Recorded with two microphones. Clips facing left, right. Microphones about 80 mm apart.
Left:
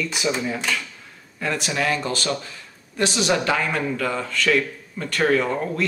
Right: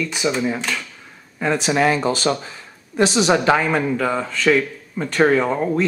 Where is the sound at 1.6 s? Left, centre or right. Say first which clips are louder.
Right 7 dB; right.